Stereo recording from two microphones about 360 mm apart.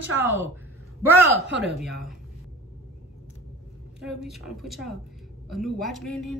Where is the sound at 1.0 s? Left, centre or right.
Right.